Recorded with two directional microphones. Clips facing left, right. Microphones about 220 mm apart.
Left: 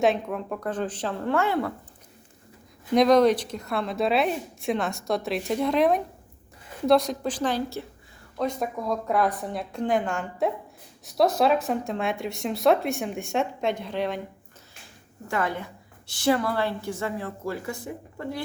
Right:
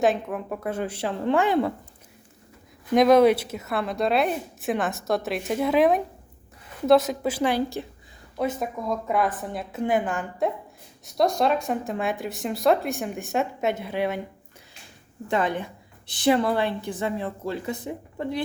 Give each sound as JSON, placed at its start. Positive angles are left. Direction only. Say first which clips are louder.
{"t": 0.0, "sound": "a woman's voice", "louder": "even", "side_deg": 0}
{"t": 2.9, "sound": "speech", "louder": "right 2 dB", "side_deg": -5}
{"t": 15.3, "sound": "a woman's voice", "louder": "right 3 dB", "side_deg": -20}